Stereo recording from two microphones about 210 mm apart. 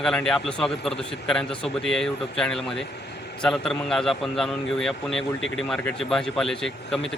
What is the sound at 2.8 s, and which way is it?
Vehicle, 50° left (ahead or behind).